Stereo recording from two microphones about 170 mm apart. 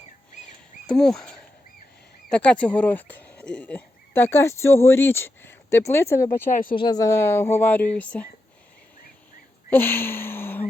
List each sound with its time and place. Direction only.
0.9 s speech: 5° left (ahead or behind)
6.5 s speech: 50° left (ahead or behind)
6.7 s speech: 25° left (ahead or behind)
9.6 s a sound: 10° left (ahead or behind)